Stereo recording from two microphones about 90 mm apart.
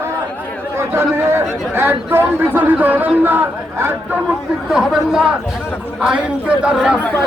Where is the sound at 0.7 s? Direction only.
30° right (ahead or behind).